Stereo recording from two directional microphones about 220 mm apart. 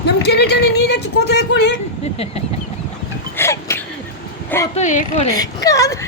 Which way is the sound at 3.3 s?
10° left (ahead or behind).